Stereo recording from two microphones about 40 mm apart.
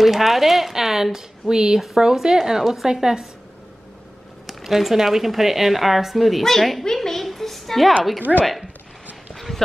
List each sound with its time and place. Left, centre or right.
0.0 s speech: centre
4.5 s a woman's voice: centre
9.3 s a sound: centre